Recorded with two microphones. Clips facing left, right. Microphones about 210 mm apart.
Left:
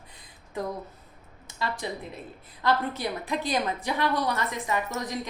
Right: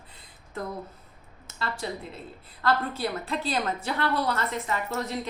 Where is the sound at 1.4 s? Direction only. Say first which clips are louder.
Left 1 dB; 15° left (ahead or behind).